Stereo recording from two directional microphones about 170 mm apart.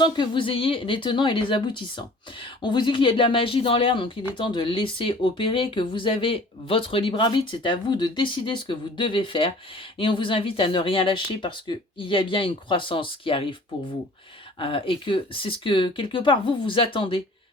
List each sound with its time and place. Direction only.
0.0 s speech: 30° left (ahead or behind)
14.6 s speech: 30° left (ahead or behind)